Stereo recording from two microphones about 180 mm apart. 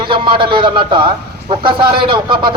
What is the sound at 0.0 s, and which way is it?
A man's voice, 25° right (ahead or behind).